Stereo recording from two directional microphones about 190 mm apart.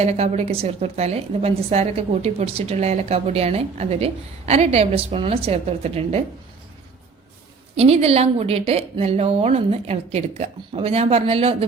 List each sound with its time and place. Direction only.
0.0 s a woman's voice: 35° right (ahead or behind)
7.8 s a woman's voice: 30° right (ahead or behind)